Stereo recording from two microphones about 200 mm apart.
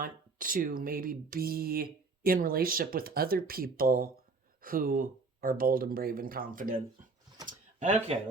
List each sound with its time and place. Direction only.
0.0 s speech: 45° right (ahead or behind)